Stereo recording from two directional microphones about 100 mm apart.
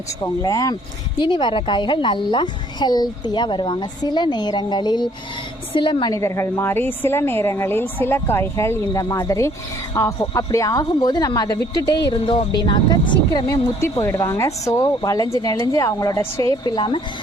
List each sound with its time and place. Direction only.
0.2 s speech: 35° left (ahead or behind)
1.2 s a woman's voice: 50° left (ahead or behind)
6.1 s a woman's voice: 30° left (ahead or behind)
8.9 s a woman's voice: 35° left (ahead or behind)
13.7 s speech: 30° left (ahead or behind)
16.6 s a woman's voice: 50° left (ahead or behind)